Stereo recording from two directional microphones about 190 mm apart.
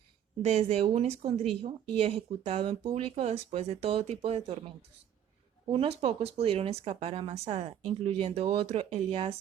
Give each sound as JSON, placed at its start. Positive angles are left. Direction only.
{"t": 0.4, "sound": "speech", "side_deg": -35}
{"t": 5.7, "sound": "speech", "side_deg": -30}